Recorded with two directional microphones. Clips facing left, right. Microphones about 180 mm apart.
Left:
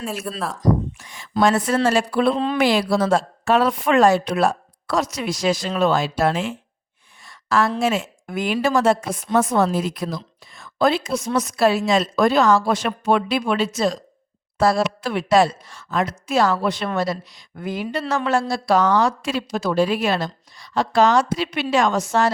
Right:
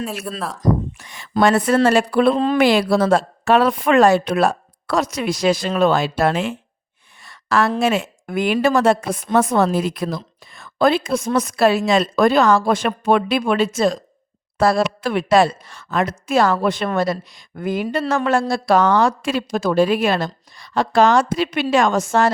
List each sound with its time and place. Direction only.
0.3 s speech: centre (ahead or behind)
0.6 s a woman's voice: 65° right (ahead or behind)